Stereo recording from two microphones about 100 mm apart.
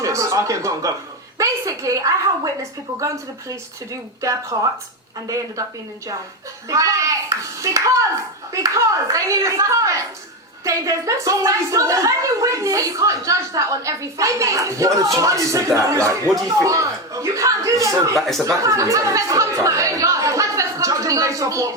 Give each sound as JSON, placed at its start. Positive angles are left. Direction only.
{"t": 0.0, "sound": "a woman's voice", "side_deg": -30}
{"t": 4.2, "sound": "a woman's voice", "side_deg": -30}
{"t": 6.7, "sound": "a woman's voice", "side_deg": -35}
{"t": 18.2, "sound": "speech", "side_deg": 5}
{"t": 18.4, "sound": "speech", "side_deg": -30}